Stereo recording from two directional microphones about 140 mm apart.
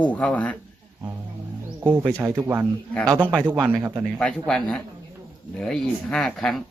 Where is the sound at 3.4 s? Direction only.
10° right (ahead or behind).